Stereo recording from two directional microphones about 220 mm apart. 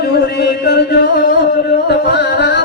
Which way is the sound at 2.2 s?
50° left (ahead or behind).